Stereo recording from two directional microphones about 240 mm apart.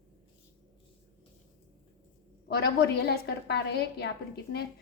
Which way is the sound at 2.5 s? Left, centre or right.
Left.